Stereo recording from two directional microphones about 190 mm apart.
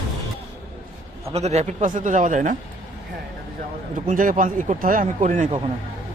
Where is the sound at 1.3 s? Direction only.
35° right (ahead or behind).